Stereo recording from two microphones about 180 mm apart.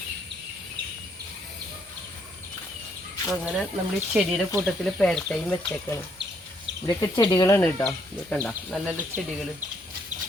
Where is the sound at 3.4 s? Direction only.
5° right (ahead or behind).